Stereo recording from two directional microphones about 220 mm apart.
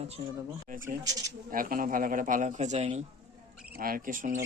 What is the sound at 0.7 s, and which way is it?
A man's voice, 35° right (ahead or behind).